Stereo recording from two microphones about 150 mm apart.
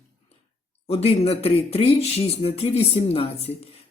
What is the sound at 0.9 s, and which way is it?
Speech, 45° left (ahead or behind).